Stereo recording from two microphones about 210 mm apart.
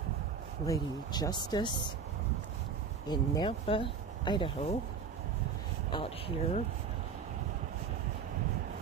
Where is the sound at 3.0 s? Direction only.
20° left (ahead or behind).